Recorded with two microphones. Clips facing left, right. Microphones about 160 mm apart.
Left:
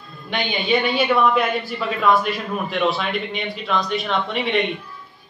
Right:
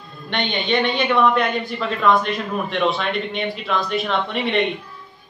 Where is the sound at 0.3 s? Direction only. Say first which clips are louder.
Left 1 dB; centre (ahead or behind).